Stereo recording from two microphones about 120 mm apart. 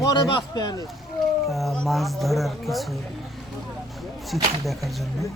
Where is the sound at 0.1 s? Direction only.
35° left (ahead or behind).